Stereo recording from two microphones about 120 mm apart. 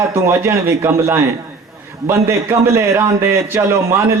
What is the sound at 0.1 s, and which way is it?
A man's voice, 25° right (ahead or behind).